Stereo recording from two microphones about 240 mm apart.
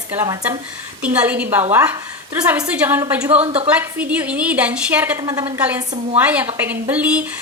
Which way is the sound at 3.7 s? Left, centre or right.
Centre.